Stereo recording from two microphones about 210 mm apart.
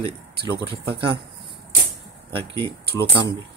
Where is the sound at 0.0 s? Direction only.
25° right (ahead or behind).